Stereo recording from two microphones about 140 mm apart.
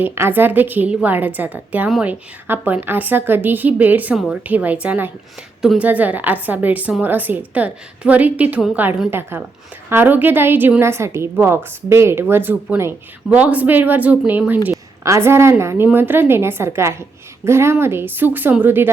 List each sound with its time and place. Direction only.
0.0 s a woman's voice: 15° right (ahead or behind)